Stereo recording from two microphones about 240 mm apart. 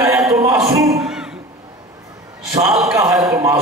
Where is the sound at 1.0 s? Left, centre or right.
Centre.